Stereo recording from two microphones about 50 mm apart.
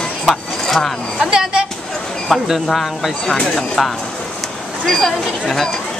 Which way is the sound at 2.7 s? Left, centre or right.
Centre.